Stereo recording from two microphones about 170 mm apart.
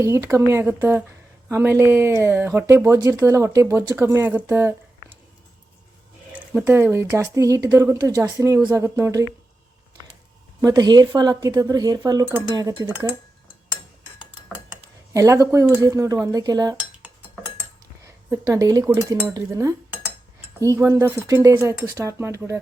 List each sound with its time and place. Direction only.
0.0 s speech: 15° right (ahead or behind)
6.3 s speech: 10° right (ahead or behind)
10.6 s speech: 20° right (ahead or behind)
15.1 s speech: 20° right (ahead or behind)
18.0 s speech: 15° right (ahead or behind)